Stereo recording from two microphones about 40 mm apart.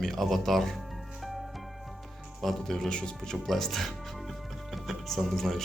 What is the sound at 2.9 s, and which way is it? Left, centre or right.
Speech, centre.